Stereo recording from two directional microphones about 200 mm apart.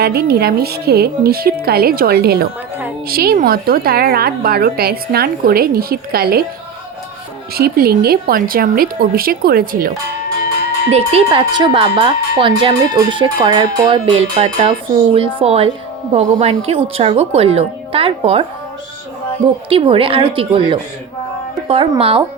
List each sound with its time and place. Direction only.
0.0 s a woman's voice: 50° right (ahead or behind)
7.5 s a woman's voice: 50° right (ahead or behind)
10.8 s speech: 30° right (ahead or behind)
19.7 s speech: 25° right (ahead or behind)